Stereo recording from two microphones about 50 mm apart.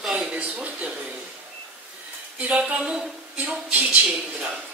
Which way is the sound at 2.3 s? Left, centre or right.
Right.